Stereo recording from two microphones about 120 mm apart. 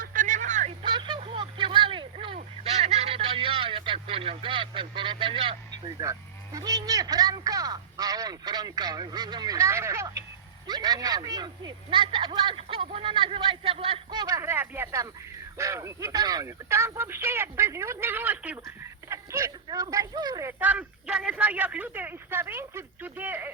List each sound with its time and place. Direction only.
0.2 s a sound: 90° right
0.8 s a sound: 40° right (ahead or behind)
1.4 s vehicle: 40° right (ahead or behind)
2.1 s a sound: 55° right (ahead or behind)
5.7 s speech: 30° right (ahead or behind)
12.6 s speech: 50° right (ahead or behind)
14.1 s speech: 30° right (ahead or behind)
16.6 s speech: 20° right (ahead or behind)
20.5 s speech: 15° right (ahead or behind)